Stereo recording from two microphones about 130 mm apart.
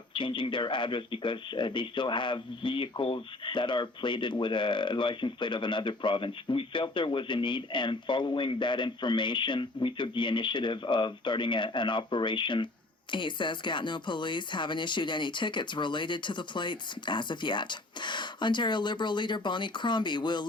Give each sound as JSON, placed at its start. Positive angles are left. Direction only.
{"t": 0.1, "sound": "speech", "side_deg": 40}